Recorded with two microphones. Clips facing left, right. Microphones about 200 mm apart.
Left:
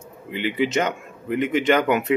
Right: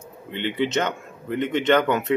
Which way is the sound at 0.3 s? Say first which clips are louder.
Left 1 dB; 5° left (ahead or behind).